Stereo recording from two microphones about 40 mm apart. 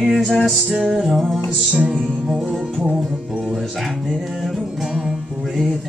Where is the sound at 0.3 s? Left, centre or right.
Centre.